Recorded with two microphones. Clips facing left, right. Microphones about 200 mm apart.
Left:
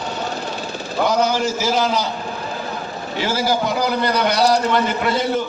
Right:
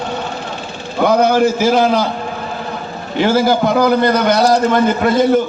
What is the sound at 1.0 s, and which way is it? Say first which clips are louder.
A man's voice: right 7 dB; 55° right (ahead or behind).